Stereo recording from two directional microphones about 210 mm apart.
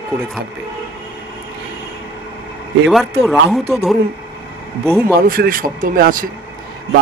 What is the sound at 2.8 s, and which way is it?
A man's voice, centre (ahead or behind).